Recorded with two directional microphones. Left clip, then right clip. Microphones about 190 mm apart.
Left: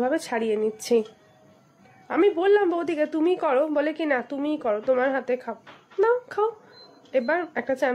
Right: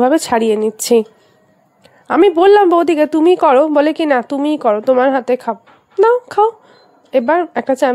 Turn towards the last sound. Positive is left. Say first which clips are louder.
# right 11 dB
turn(degrees=-45)  # may be behind; listen again after turning